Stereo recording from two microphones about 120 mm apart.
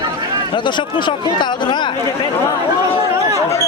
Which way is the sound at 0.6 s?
40° left (ahead or behind).